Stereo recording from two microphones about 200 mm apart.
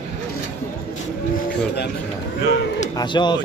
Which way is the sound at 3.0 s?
20° left (ahead or behind).